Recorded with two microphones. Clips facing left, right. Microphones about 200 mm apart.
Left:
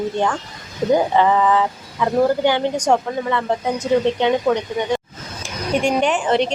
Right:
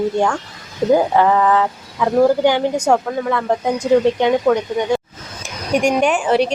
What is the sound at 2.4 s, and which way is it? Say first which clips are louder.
A woman's voice: right 2 dB; 10° right (ahead or behind).